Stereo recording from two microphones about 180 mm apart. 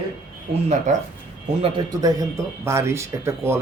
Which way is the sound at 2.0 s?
15° right (ahead or behind).